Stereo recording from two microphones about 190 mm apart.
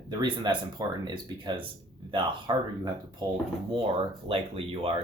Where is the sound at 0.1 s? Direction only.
25° right (ahead or behind).